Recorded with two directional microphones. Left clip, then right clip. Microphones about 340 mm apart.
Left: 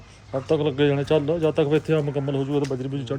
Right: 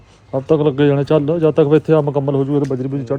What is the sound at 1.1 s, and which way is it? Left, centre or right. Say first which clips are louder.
Speech: right 7 dB; right.